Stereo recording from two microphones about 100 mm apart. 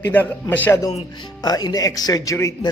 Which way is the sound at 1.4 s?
40° left (ahead or behind).